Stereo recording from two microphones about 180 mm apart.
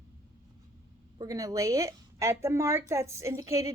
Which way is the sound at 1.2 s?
20° right (ahead or behind).